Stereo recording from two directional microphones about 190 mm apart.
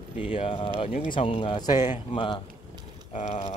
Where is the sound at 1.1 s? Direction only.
30° left (ahead or behind).